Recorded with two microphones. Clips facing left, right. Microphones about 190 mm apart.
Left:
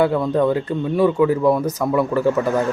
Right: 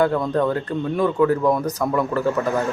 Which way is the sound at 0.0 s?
10° left (ahead or behind).